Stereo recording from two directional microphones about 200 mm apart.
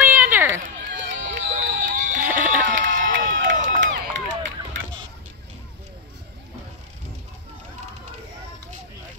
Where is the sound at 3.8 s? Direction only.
70° right (ahead or behind).